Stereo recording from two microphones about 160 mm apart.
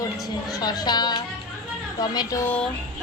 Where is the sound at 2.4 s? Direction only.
10° left (ahead or behind).